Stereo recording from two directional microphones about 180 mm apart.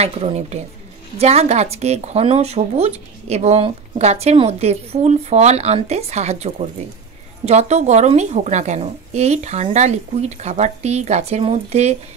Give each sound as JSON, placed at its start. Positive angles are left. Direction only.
{"t": 0.0, "sound": "speech", "side_deg": -35}